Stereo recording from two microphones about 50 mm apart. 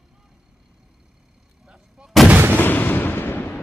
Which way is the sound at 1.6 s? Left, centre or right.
Centre.